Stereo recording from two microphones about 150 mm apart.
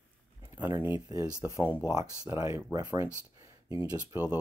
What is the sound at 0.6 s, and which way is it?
Speech, 15° right (ahead or behind).